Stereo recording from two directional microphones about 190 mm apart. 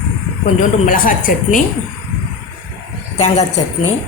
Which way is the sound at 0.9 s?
45° left (ahead or behind).